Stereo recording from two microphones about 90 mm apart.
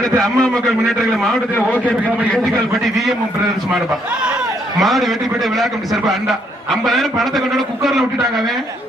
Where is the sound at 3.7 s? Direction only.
10° right (ahead or behind).